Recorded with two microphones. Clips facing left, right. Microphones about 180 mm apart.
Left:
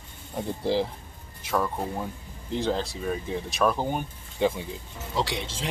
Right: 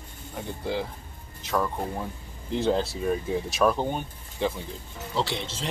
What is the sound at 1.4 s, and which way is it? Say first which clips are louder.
Speech: even; 10° left (ahead or behind).